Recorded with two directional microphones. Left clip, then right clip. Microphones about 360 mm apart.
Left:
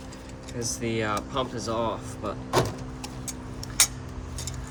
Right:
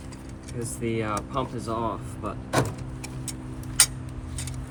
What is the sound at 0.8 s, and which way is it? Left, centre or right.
Speech, centre.